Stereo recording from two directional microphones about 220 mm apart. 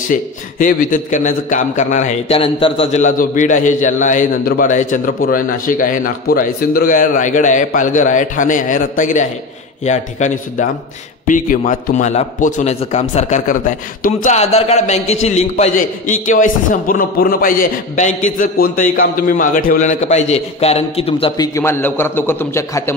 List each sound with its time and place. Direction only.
0.1 s a man's voice: 40° left (ahead or behind); by 22.9 s 10° left (ahead or behind)